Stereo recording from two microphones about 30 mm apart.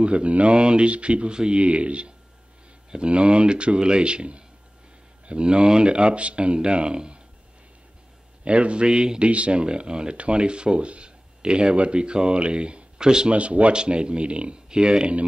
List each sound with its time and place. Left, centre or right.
0.0 s speech: right
0.6 s speech: right
1.3 s speech: right
1.6 s speech: right
8.5 s speech: right
9.2 s speech: right
10.1 s speech: right
13.3 s speech: right
13.7 s speech: right